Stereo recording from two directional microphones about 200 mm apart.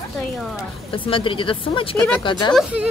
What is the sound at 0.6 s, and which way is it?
Speech, 25° left (ahead or behind).